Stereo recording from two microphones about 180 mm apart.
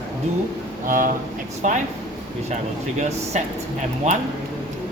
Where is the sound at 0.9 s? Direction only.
45° right (ahead or behind).